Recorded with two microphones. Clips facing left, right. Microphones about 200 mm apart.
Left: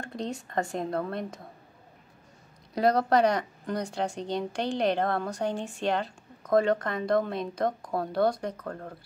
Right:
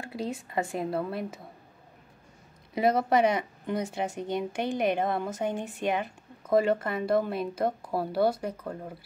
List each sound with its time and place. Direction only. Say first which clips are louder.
0.0 s a woman's voice: even; 5° right (ahead or behind)
2.7 s a woman's voice: left 1 dB; 5° right (ahead or behind)
5.9 s a woman's voice: left 1 dB; 15° right (ahead or behind)
6.4 s a woman's voice: even; 5° right (ahead or behind)